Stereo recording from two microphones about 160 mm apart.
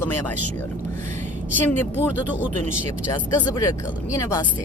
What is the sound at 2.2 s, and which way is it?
Speech, 10° right (ahead or behind).